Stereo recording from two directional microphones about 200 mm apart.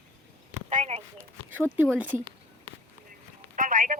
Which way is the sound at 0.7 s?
35° right (ahead or behind).